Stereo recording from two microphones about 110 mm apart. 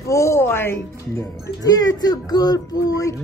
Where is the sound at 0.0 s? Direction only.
25° left (ahead or behind).